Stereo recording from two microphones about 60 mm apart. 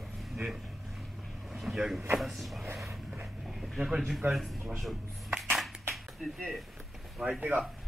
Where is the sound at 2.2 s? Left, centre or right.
Centre.